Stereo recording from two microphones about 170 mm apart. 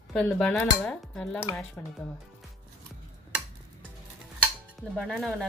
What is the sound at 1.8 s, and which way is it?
Speech, 10° left (ahead or behind).